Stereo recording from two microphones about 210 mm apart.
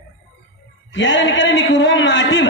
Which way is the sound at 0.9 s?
60° left (ahead or behind).